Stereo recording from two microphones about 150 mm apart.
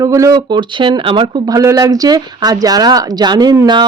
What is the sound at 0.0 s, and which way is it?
Speech, 20° right (ahead or behind).